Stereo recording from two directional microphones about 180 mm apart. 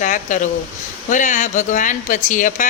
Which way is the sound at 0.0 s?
45° left (ahead or behind).